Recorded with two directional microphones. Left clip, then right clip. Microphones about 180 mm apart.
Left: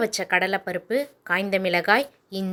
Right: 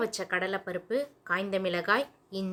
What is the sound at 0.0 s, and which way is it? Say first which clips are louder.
Speech: left 8 dB; 35° left (ahead or behind).